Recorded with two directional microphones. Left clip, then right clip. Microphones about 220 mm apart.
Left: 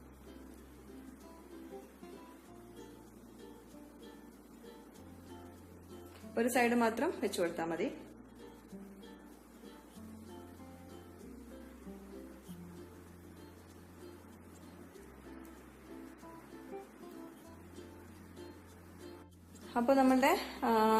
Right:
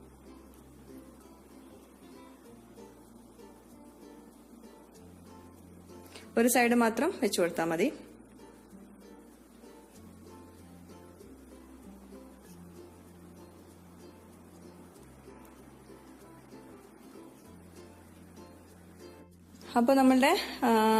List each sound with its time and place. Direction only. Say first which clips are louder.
6.3 s speech: right 6 dB; 40° right (ahead or behind)
19.7 s speech: right 5 dB; 40° right (ahead or behind)